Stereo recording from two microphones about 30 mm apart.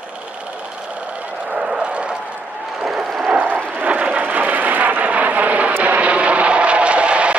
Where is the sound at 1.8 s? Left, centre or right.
Right.